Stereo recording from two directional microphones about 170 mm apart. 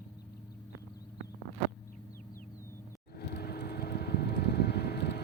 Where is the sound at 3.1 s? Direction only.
70° left (ahead or behind).